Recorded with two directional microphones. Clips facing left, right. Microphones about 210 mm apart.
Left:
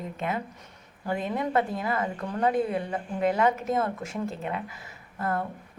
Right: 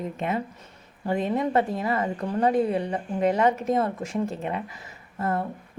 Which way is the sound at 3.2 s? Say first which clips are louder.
Right 2 dB; 40° right (ahead or behind).